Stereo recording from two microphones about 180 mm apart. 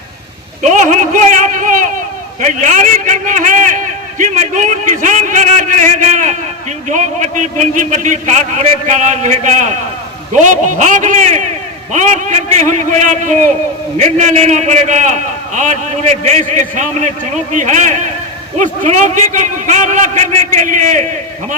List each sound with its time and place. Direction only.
0.6 s a man's voice: 45° right (ahead or behind)